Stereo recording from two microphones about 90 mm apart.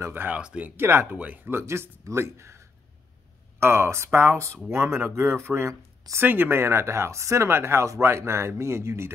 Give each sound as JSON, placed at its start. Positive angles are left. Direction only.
{"t": 0.0, "sound": "speech", "side_deg": -20}
{"t": 0.8, "sound": "speech", "side_deg": -30}
{"t": 1.1, "sound": "speech", "side_deg": -15}